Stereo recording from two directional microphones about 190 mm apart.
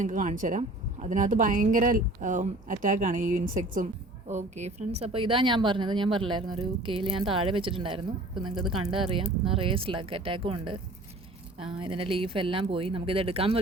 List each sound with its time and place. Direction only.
0.0 s a woman's voice: 40° right (ahead or behind)
11.8 s speech: 30° right (ahead or behind)